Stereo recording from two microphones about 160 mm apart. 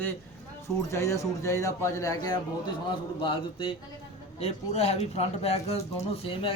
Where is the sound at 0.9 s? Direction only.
20° left (ahead or behind).